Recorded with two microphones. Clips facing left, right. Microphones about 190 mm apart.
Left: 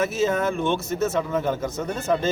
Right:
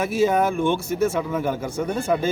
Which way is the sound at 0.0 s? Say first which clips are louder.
Right 2 dB; 10° right (ahead or behind).